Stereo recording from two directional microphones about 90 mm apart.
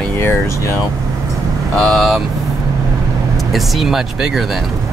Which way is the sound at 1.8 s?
Centre (ahead or behind).